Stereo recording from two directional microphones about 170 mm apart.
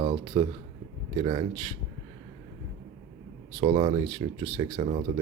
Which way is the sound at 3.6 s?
30° right (ahead or behind).